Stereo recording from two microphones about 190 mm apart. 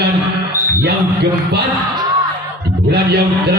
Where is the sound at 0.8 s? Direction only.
60° right (ahead or behind).